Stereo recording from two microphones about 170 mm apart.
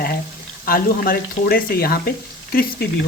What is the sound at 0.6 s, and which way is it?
Speech, 60° left (ahead or behind).